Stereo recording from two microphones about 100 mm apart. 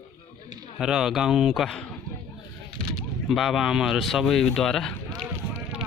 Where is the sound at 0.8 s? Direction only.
5° right (ahead or behind).